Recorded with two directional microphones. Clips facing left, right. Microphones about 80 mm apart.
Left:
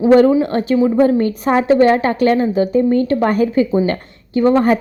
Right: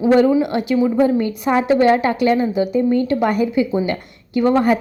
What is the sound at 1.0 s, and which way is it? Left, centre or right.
A woman's voice, left.